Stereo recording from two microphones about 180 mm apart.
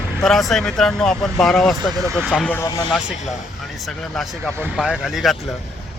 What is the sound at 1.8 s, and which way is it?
Speech, 20° right (ahead or behind).